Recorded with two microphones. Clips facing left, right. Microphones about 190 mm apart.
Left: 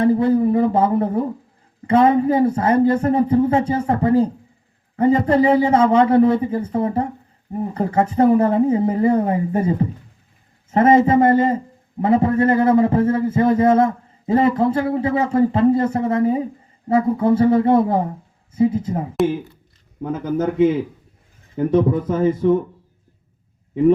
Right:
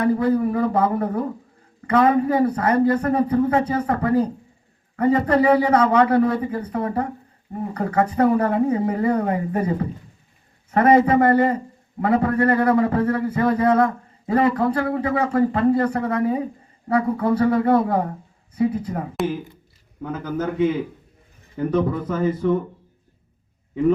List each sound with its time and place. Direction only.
0.0 s a man's voice: 25° left (ahead or behind)
20.2 s a man's voice: 25° left (ahead or behind)
21.5 s a man's voice: 25° left (ahead or behind)